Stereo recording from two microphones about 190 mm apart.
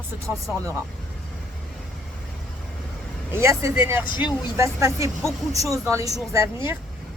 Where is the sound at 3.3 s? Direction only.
15° right (ahead or behind).